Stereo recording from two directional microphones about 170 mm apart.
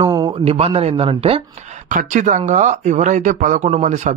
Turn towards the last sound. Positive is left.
turn(degrees=-45)  # may be behind; listen again after turning